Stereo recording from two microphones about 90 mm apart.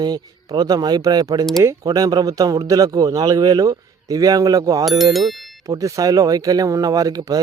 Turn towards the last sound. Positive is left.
turn(degrees=-45)  # may be behind; listen again after turning